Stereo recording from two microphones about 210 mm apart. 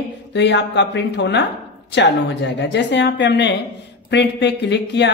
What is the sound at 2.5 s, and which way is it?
Speech, 55° left (ahead or behind).